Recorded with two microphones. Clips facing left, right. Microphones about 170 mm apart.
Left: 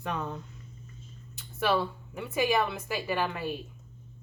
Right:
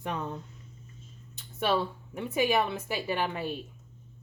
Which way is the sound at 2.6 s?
25° right (ahead or behind).